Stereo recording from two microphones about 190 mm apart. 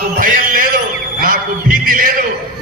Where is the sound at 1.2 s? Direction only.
45° right (ahead or behind).